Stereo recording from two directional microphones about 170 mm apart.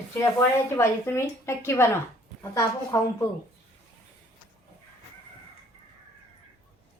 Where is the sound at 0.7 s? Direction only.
15° left (ahead or behind).